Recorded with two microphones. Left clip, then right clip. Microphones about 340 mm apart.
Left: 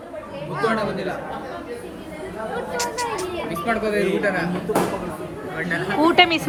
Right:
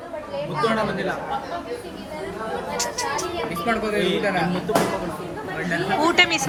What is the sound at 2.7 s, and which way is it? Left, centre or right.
Speech, centre.